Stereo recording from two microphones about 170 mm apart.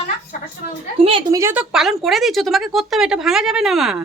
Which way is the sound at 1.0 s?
35° right (ahead or behind).